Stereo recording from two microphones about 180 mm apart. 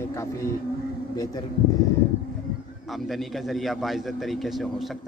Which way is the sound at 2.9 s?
Centre (ahead or behind).